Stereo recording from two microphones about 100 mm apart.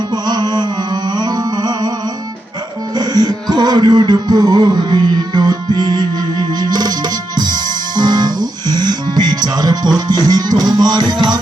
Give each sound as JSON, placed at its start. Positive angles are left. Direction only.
{"t": 0.1, "sound": "music", "side_deg": -40}
{"t": 2.9, "sound": "music", "side_deg": -45}